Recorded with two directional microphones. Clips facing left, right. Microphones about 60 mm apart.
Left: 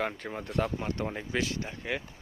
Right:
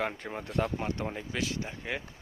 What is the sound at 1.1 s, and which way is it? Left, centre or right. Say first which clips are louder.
Speech: left 3 dB; centre.